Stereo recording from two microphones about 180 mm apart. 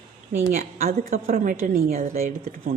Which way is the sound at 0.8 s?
35° right (ahead or behind).